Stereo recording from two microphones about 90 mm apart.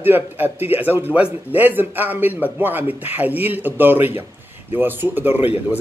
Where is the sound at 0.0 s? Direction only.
20° right (ahead or behind).